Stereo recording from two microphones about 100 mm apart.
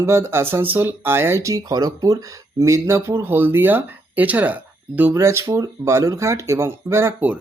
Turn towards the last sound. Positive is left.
turn(degrees=-25)  # may be behind; listen again after turning